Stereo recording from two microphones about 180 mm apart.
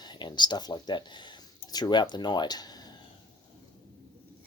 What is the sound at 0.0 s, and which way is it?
Speech, 25° left (ahead or behind).